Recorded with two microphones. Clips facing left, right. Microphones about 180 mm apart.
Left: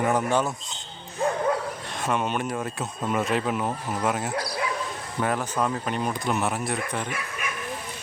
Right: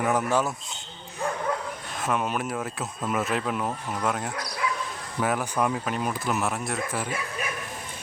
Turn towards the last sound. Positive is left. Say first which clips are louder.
# right 1 dB
turn(degrees=-35)  # may be behind; listen again after turning